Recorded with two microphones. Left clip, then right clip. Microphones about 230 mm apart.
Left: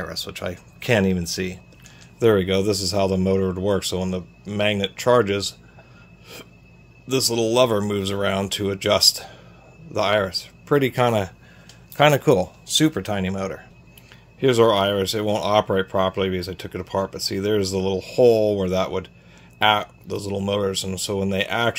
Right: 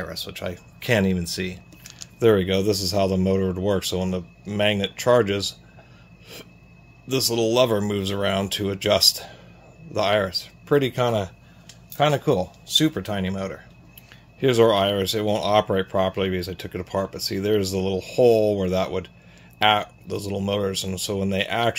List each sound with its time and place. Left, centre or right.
0.0 s speech: centre
7.1 s speech: centre
14.4 s speech: centre